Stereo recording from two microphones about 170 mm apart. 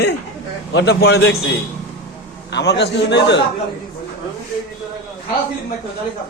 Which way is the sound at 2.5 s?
85° left.